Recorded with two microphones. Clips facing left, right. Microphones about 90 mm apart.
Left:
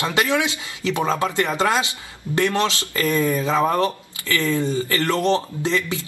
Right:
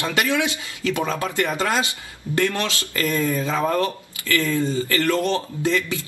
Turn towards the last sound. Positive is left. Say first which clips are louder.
# even
turn(degrees=20)  # may be behind; listen again after turning